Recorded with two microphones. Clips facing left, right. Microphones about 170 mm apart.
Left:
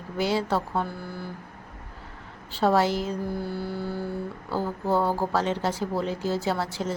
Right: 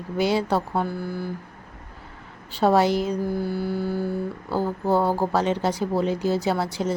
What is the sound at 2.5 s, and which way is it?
Speech, 15° right (ahead or behind).